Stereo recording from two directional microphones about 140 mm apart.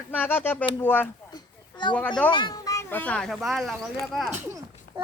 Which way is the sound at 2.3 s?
30° left (ahead or behind).